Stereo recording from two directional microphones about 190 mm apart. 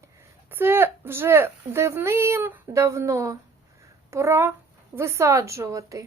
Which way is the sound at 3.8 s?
15° right (ahead or behind).